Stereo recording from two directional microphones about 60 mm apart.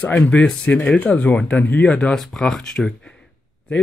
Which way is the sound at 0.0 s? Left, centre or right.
Left.